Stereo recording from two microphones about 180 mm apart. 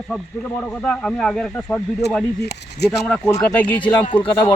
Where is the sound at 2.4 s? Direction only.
65° left (ahead or behind).